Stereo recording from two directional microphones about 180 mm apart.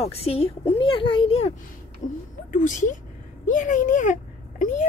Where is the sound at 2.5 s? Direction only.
45° left (ahead or behind).